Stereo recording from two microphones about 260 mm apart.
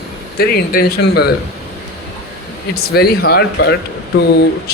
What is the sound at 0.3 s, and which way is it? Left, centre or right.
Speech, left.